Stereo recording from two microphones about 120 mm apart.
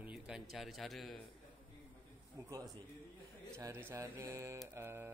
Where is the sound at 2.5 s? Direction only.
30° right (ahead or behind).